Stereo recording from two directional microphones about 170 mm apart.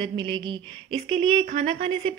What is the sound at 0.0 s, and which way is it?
A woman's voice, 30° right (ahead or behind).